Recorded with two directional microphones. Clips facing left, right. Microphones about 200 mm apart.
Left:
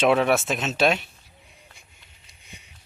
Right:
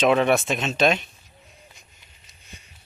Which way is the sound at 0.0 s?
5° left (ahead or behind).